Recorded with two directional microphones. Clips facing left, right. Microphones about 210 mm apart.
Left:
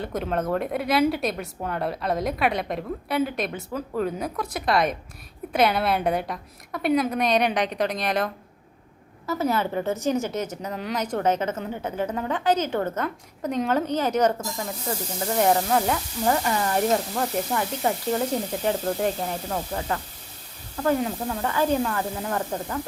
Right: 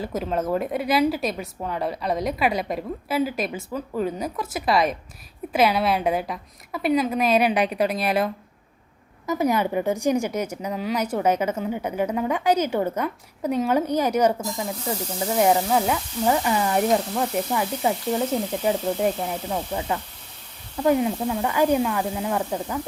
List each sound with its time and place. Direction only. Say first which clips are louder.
0.0 s a woman's voice: right 1 dB; centre (ahead or behind)